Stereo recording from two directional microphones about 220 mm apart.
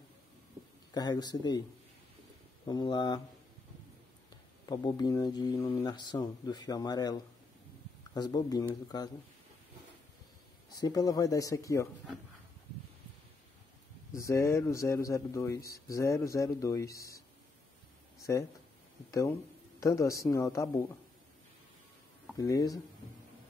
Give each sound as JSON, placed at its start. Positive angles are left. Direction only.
{"t": 0.9, "sound": "speech", "side_deg": 20}
{"t": 2.6, "sound": "speech", "side_deg": 20}
{"t": 4.6, "sound": "speech", "side_deg": 15}
{"t": 10.8, "sound": "speech", "side_deg": 15}
{"t": 14.1, "sound": "speech", "side_deg": 15}
{"t": 18.3, "sound": "speech", "side_deg": 15}
{"t": 19.8, "sound": "speech", "side_deg": 15}
{"t": 22.4, "sound": "speech", "side_deg": 15}